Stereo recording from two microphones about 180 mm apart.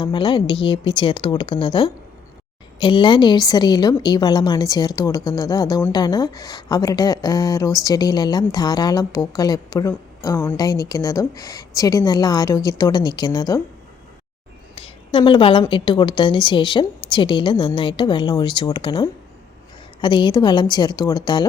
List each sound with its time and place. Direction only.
0.0 s a woman's voice: 25° left (ahead or behind)
14.8 s a sound: 30° left (ahead or behind)
15.7 s a woman's voice: 25° left (ahead or behind)